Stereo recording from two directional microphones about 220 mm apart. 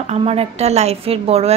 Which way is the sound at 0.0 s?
30° right (ahead or behind).